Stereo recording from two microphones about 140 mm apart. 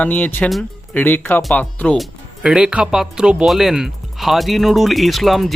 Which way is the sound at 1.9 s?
Centre (ahead or behind).